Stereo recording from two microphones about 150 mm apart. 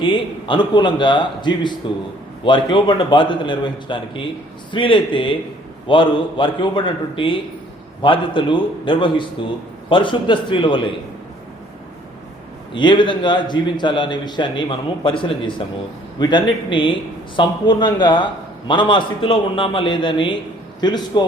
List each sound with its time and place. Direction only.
0.0 s a man's voice: 30° left (ahead or behind)
12.7 s a man's voice: 30° left (ahead or behind)